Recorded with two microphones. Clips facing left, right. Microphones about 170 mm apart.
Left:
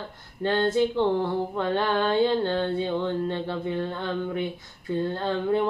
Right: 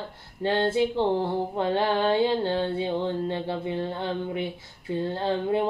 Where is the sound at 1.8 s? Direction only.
30° right (ahead or behind).